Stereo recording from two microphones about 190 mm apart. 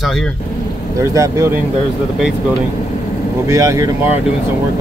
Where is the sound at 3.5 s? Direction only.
15° right (ahead or behind).